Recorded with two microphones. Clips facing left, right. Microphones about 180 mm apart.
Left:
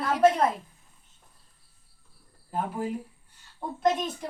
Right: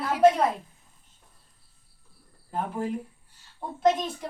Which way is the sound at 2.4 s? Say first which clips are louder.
Even; 5° left (ahead or behind).